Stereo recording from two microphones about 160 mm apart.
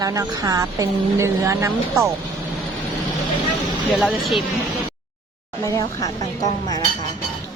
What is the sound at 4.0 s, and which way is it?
Speech, centre (ahead or behind).